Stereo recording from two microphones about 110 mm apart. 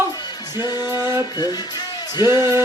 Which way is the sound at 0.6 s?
40° left (ahead or behind).